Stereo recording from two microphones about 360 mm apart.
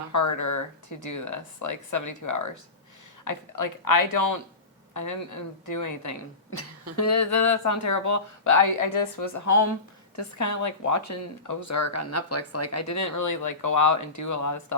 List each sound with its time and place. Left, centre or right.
0.1 s speech: left
6.5 s speech: left
10.3 s speech: left